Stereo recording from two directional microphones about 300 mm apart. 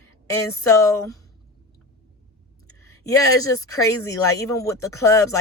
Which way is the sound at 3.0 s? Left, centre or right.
Centre.